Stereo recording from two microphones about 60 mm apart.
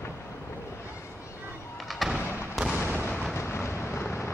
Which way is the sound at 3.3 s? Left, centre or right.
Left.